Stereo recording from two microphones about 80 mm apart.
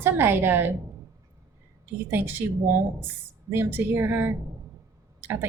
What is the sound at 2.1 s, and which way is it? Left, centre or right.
Speech, right.